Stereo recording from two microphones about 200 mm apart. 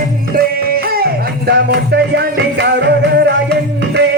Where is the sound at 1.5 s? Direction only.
55° right (ahead or behind).